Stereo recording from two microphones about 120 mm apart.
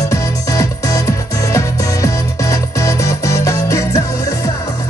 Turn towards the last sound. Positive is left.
turn(degrees=25)  # may be behind; listen again after turning